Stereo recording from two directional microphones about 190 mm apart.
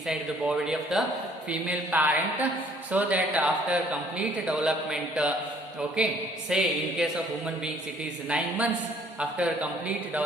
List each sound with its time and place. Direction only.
0.1 s a man's voice: 5° right (ahead or behind)
6.5 s a man's voice: 5° right (ahead or behind)
8.3 s a man's voice: 5° right (ahead or behind)